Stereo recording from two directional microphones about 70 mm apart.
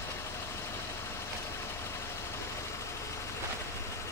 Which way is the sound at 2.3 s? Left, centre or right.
Left.